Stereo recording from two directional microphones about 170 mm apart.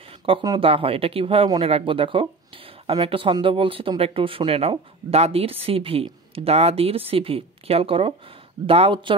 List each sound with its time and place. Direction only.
0.2 s speech: 25° right (ahead or behind)